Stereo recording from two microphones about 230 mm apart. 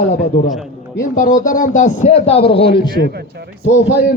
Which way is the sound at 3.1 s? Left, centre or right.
Right.